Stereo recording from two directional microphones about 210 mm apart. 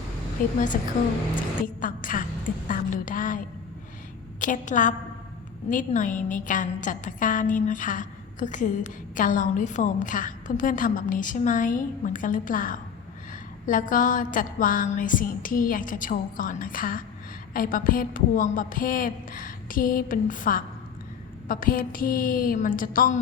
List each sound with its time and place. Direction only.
0.7 s a woman's voice: 45° left (ahead or behind)